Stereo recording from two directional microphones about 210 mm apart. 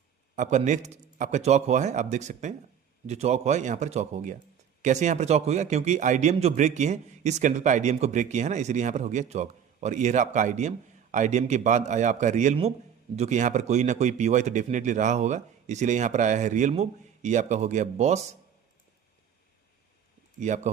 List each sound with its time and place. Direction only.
0.3 s a man's voice: 35° right (ahead or behind)
20.4 s a man's voice: 35° right (ahead or behind)